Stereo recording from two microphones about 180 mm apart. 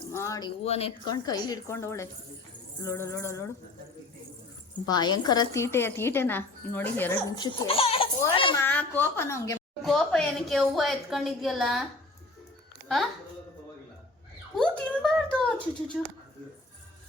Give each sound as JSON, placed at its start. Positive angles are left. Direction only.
{"t": 0.1, "sound": "speech", "side_deg": 15}
{"t": 0.6, "sound": "speech", "side_deg": 35}
{"t": 1.1, "sound": "speech", "side_deg": 20}
{"t": 4.9, "sound": "speech", "side_deg": 25}
{"t": 7.3, "sound": "speech", "side_deg": 25}
{"t": 8.4, "sound": "a sound", "side_deg": 25}
{"t": 8.6, "sound": "a woman's voice", "side_deg": 10}
{"t": 9.8, "sound": "a woman's voice", "side_deg": 0}
{"t": 14.5, "sound": "a woman's voice", "side_deg": 5}